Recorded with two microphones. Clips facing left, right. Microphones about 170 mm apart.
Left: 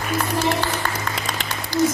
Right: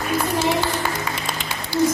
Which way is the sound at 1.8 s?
90° left.